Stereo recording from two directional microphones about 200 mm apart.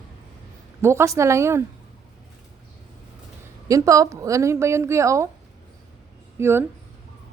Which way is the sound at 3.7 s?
15° right (ahead or behind).